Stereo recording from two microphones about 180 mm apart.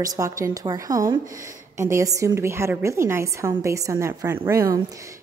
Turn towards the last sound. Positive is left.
turn(degrees=-15)  # may be behind; listen again after turning